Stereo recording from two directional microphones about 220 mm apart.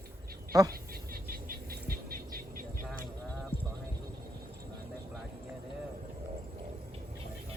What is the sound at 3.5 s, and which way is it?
Hum, 25° left (ahead or behind).